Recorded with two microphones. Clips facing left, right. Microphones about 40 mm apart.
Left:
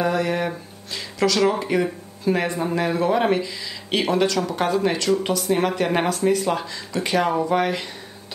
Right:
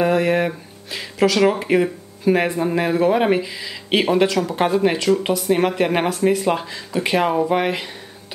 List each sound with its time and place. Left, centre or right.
0.0 s speech: right